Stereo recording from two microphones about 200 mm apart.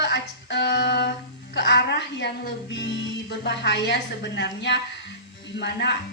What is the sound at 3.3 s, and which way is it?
A woman's voice, 60° left (ahead or behind).